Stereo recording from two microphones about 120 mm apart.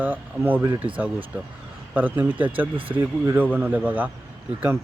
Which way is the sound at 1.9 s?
15° right (ahead or behind).